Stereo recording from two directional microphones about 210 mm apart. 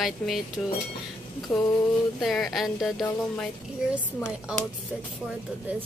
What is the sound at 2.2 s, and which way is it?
Speech, centre (ahead or behind).